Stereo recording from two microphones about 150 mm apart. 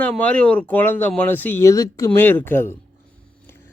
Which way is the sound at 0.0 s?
10° left (ahead or behind).